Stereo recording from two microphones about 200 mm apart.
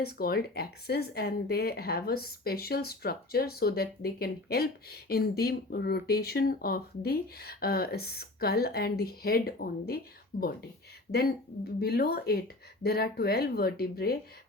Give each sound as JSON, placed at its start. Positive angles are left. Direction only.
{"t": 0.0, "sound": "speech", "side_deg": 50}
{"t": 11.8, "sound": "speech", "side_deg": 50}